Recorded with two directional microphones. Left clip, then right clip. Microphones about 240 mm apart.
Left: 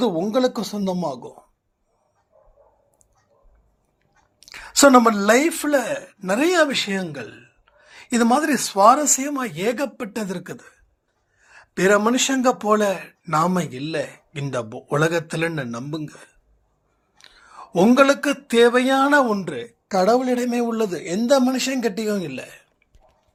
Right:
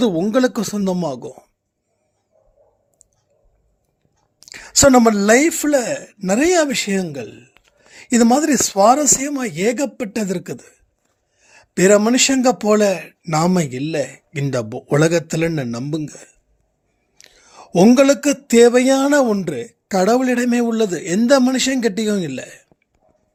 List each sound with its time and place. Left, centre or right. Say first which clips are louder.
0.0 s speech: right 3 dB; right
4.4 s speech: right 1 dB; right
17.2 s whispering: left 1 dB; right
17.7 s speech: right 3 dB; right